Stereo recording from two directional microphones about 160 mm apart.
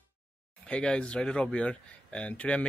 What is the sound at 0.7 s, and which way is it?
Speech, 5° left (ahead or behind).